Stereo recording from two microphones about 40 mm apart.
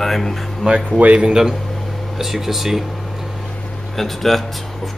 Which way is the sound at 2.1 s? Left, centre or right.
Centre.